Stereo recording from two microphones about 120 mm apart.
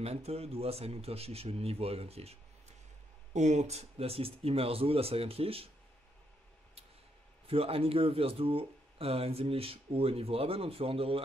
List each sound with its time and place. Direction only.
0.0 s speech: 60° right (ahead or behind)
3.3 s speech: 70° right (ahead or behind); by 5.7 s 55° right (ahead or behind)
7.4 s speech: 55° right (ahead or behind)